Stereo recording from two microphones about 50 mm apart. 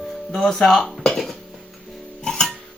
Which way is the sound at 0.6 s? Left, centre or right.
Centre.